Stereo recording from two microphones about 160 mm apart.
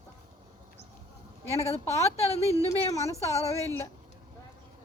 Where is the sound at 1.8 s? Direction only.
40° left (ahead or behind).